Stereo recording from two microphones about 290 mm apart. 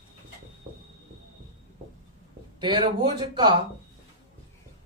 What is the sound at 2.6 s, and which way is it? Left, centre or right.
Speech, centre.